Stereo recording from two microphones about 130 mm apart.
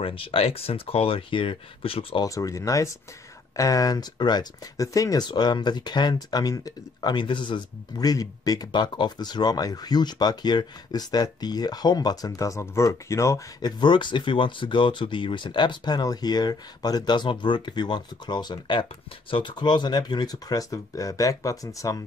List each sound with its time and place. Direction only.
0.0 s speech: 45° left (ahead or behind)
2.2 s speech: 25° left (ahead or behind)